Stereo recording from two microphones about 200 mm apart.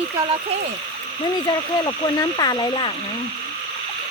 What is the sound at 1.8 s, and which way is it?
Speech, 20° left (ahead or behind).